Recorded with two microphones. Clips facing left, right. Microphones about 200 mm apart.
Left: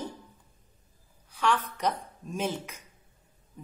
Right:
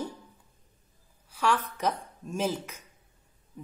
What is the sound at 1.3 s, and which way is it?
Speech, 10° right (ahead or behind).